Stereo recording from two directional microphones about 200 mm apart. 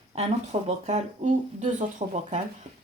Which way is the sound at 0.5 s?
35° right (ahead or behind).